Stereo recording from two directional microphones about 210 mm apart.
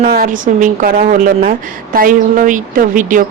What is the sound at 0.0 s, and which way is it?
A woman's voice, 40° right (ahead or behind).